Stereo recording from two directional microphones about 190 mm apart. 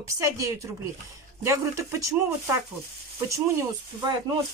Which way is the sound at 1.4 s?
15° right (ahead or behind).